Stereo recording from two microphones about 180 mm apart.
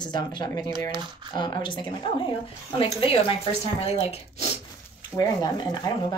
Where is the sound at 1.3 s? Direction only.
25° left (ahead or behind).